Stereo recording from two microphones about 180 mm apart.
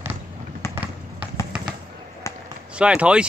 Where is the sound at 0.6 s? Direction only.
15° left (ahead or behind).